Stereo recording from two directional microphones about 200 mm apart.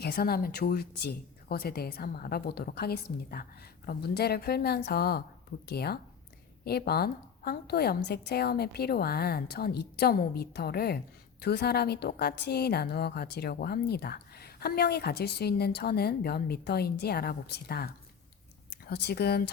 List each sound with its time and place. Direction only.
0.0 s a woman's voice: 50° left (ahead or behind)